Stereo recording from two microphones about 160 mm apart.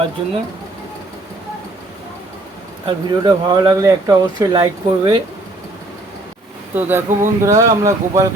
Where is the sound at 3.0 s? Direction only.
25° right (ahead or behind).